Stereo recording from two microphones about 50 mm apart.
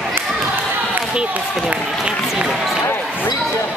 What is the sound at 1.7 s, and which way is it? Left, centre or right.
Run, centre.